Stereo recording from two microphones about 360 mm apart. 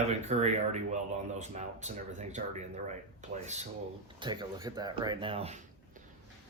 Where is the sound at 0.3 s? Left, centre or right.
Centre.